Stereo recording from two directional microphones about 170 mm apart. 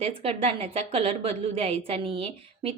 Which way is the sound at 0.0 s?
35° right (ahead or behind).